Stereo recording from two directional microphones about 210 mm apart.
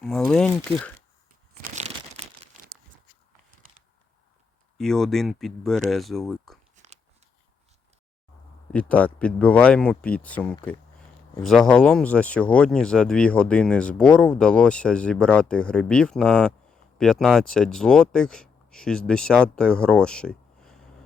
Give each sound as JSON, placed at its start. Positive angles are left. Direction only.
{"t": 0.0, "sound": "speech", "side_deg": 5}
{"t": 4.8, "sound": "speech", "side_deg": 0}
{"t": 8.7, "sound": "speech", "side_deg": 5}